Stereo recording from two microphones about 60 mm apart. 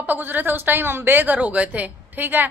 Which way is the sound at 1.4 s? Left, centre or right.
Right.